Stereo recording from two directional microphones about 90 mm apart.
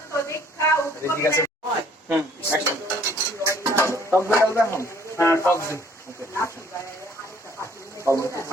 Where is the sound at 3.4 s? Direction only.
30° right (ahead or behind).